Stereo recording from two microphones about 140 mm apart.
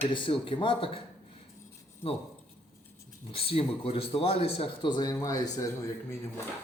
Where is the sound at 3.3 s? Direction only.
45° left (ahead or behind); by 5.4 s 25° left (ahead or behind).